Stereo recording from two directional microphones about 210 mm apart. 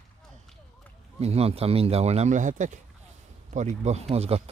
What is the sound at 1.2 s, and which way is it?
Speech, 30° right (ahead or behind).